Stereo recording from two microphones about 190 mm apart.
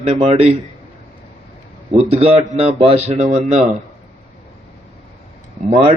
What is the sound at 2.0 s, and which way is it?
Speech, 30° right (ahead or behind).